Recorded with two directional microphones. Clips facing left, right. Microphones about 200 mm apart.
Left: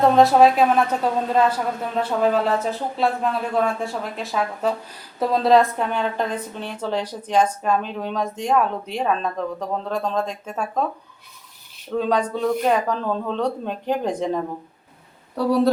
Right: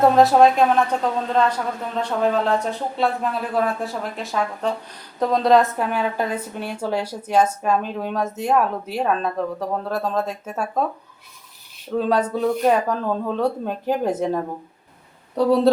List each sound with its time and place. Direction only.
0.0 s a woman's voice: centre (ahead or behind)
11.9 s a woman's voice: 5° right (ahead or behind)
15.4 s a woman's voice: 20° right (ahead or behind)